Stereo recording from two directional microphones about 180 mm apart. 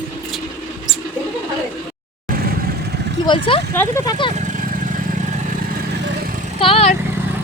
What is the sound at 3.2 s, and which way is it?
Speech, 30° left (ahead or behind).